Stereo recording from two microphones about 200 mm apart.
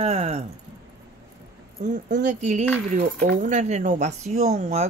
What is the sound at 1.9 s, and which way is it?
Speech, 40° right (ahead or behind).